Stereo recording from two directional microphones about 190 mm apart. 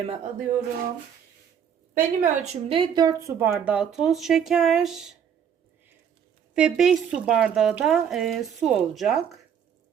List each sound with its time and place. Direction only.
0.1 s speech: 45° right (ahead or behind)
2.2 s speech: 35° right (ahead or behind); by 5.1 s centre (ahead or behind)
6.5 s speech: 5° right (ahead or behind)